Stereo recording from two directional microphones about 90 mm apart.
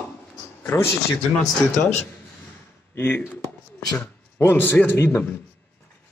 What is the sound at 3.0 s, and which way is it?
Speech, 20° left (ahead or behind).